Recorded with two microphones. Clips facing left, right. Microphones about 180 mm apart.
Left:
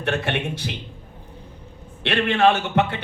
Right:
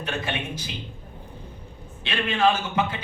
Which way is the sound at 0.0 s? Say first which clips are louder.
Left 5 dB; 65° left (ahead or behind).